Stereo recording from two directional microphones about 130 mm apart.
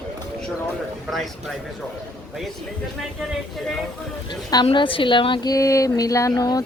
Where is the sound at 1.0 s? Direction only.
Centre (ahead or behind).